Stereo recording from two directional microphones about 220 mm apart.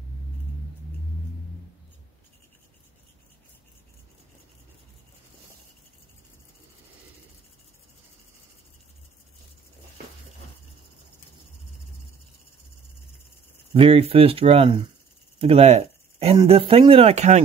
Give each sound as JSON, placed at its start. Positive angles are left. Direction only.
{"t": 13.7, "sound": "speech", "side_deg": -25}
{"t": 15.3, "sound": "a sound", "side_deg": -25}
{"t": 16.3, "sound": "speech", "side_deg": -25}